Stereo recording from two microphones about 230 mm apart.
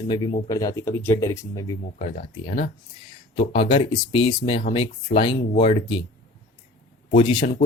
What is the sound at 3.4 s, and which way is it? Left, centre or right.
Speech, left.